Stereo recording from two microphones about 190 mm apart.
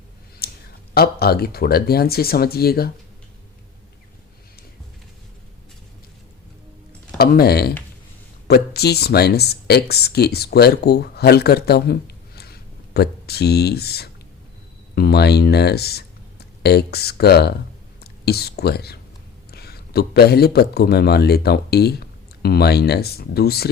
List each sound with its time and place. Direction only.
0.4 s a sound: 55° left (ahead or behind)
0.9 s speech: 55° left (ahead or behind)
7.2 s a man's voice: 55° left (ahead or behind)